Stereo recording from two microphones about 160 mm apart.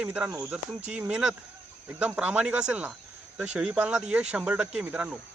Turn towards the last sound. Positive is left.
turn(degrees=-5)  # may be behind; listen again after turning